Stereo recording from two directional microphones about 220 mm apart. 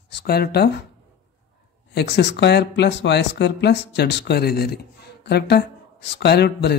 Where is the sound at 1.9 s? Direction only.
50° left (ahead or behind).